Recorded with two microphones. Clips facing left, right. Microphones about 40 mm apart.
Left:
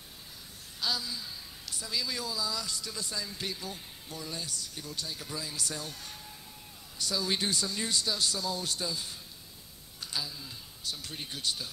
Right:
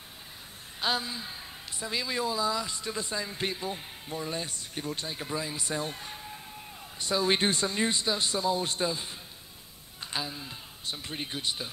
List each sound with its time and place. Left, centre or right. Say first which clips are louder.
0.7 s a woman's voice: right 4 dB; right